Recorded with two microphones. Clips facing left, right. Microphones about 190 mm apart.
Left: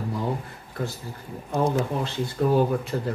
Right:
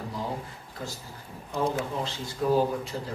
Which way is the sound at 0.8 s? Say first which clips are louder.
Left 7 dB; 60° left (ahead or behind).